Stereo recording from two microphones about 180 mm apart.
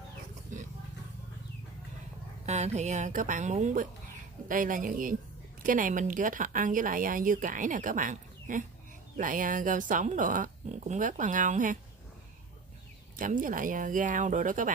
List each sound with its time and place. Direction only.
2.4 s speech: 40° right (ahead or behind)
13.1 s speech: 50° right (ahead or behind)